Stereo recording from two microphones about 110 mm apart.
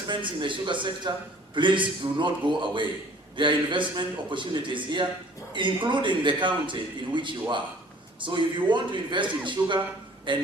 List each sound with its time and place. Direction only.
0.1 s a man's voice: 45° right (ahead or behind)